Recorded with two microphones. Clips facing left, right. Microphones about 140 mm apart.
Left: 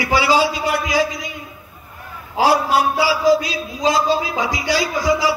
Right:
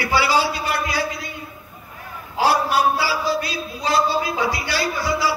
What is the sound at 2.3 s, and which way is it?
Speech, 90° left.